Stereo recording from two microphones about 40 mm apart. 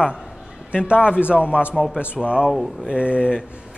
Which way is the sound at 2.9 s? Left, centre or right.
Right.